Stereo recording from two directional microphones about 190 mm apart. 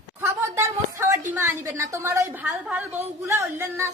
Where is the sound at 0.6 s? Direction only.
15° right (ahead or behind).